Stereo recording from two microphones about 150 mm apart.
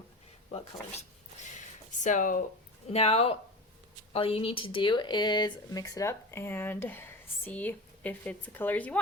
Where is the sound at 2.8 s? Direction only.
45° left (ahead or behind).